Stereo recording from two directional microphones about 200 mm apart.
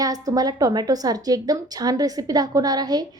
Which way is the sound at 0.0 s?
20° right (ahead or behind).